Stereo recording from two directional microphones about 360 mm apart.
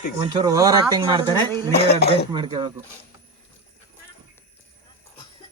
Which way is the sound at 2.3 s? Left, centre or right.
Centre.